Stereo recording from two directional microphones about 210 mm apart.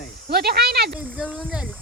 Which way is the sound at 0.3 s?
50° right (ahead or behind).